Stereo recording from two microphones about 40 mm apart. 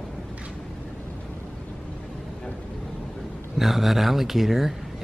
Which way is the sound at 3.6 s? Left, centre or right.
Centre.